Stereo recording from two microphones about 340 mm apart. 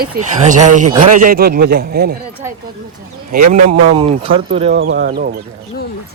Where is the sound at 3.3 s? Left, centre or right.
Right.